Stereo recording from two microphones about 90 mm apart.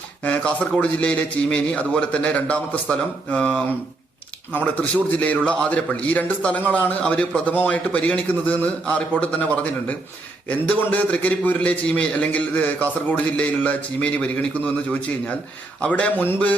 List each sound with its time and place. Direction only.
0.2 s a man's voice: 15° left (ahead or behind)